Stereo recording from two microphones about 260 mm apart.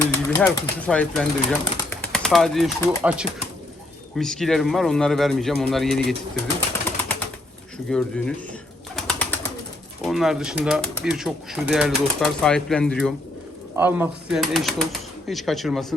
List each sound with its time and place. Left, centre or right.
0.1 s speech: centre
7.9 s speech: centre
9.0 s bird: centre
10.0 s speech: centre
13.7 s speech: centre